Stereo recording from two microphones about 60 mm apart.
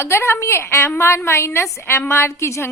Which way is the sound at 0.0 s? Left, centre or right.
Left.